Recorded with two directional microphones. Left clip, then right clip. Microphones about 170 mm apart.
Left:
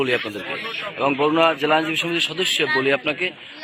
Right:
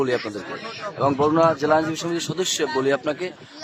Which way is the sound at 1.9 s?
10° right (ahead or behind).